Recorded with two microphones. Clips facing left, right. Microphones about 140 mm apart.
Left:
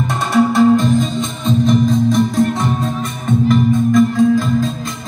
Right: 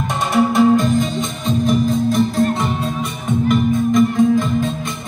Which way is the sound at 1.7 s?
5° right (ahead or behind).